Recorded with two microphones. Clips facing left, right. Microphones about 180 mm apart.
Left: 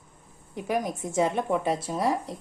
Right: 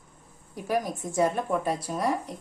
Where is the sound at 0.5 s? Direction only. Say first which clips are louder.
Even; 20° left (ahead or behind).